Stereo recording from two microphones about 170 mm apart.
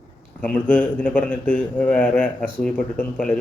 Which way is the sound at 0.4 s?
5° left (ahead or behind).